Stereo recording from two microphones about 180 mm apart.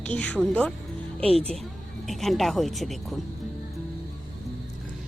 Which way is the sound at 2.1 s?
Centre (ahead or behind).